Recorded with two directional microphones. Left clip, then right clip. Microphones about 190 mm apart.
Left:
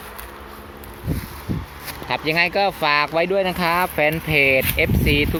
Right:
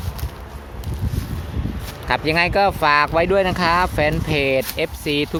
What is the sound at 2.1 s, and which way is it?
Speech, 15° right (ahead or behind).